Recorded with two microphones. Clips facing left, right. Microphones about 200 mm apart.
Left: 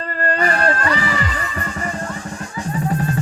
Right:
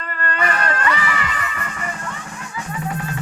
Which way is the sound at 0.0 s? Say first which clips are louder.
Left 4 dB; 35° left (ahead or behind).